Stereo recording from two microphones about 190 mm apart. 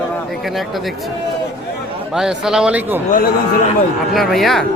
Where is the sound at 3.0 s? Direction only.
50° left (ahead or behind).